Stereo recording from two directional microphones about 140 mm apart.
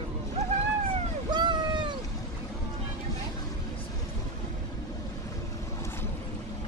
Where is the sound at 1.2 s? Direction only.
30° right (ahead or behind).